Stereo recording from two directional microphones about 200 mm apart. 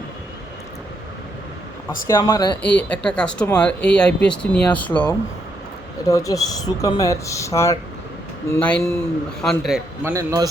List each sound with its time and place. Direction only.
2.0 s speech: 15° left (ahead or behind)
2.7 s speech: 5° left (ahead or behind)
10.0 s a man's voice: 15° right (ahead or behind)